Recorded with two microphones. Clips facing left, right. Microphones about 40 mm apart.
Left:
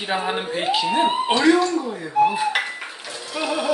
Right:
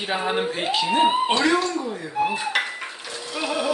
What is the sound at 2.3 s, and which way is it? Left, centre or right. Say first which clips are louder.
Dishes: left 2 dB; centre.